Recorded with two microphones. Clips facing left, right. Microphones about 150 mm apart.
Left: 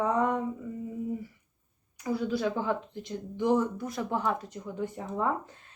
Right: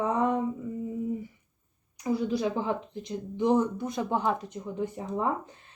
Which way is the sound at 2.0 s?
15° right (ahead or behind).